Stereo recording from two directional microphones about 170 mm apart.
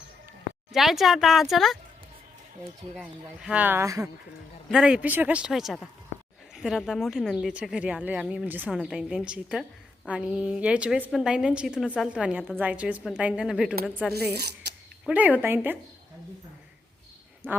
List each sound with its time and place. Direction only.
0.7 s speech: centre (ahead or behind)
2.9 s a woman's voice: 5° right (ahead or behind)
4.7 s a woman's voice: 5° right (ahead or behind)
14.3 s speech: 70° right (ahead or behind)
15.0 s a woman's voice: 10° right (ahead or behind)
17.4 s a woman's voice: 10° right (ahead or behind)